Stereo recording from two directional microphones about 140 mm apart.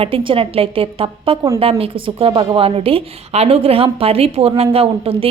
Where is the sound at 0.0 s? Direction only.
40° right (ahead or behind).